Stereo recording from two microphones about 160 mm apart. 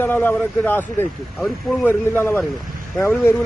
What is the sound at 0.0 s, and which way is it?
A man's voice, 10° left (ahead or behind).